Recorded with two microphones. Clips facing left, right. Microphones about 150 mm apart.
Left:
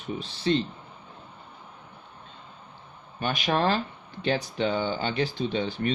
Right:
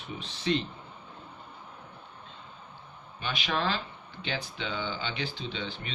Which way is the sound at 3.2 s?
45° left (ahead or behind).